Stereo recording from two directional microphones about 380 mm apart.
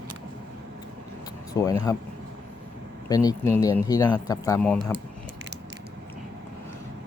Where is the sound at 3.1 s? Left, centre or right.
Centre.